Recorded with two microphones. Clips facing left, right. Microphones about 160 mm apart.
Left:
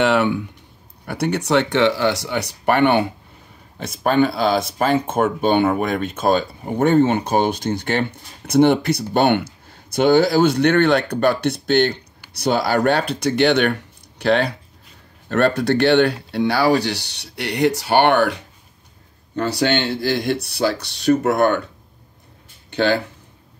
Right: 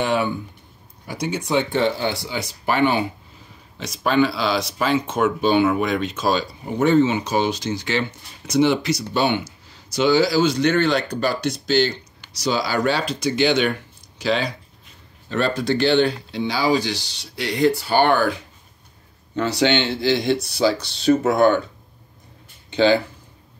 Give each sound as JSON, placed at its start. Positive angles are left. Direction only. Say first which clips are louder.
{"t": 0.0, "sound": "speech", "louder": "left 4 dB", "side_deg": 70}
{"t": 3.7, "sound": "speech", "louder": "left 2 dB", "side_deg": 50}
{"t": 19.6, "sound": "speech", "louder": "right 1 dB", "side_deg": 55}
{"t": 22.7, "sound": "speech", "louder": "right 2 dB", "side_deg": 55}